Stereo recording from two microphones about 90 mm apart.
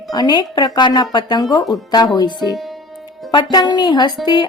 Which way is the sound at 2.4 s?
Centre (ahead or behind).